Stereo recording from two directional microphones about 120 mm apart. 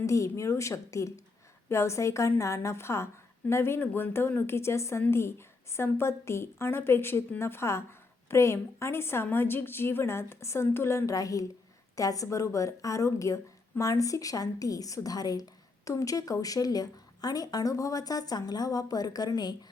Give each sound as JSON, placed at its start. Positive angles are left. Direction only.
{"t": 0.0, "sound": "speech", "side_deg": 25}